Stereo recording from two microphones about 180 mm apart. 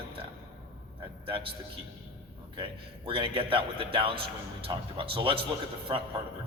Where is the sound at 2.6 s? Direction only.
30° right (ahead or behind).